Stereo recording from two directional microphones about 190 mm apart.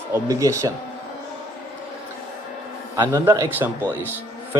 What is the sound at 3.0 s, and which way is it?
Speech, 15° right (ahead or behind).